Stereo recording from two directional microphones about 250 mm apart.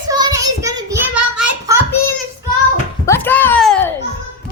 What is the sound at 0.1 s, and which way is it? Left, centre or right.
Child singing, centre.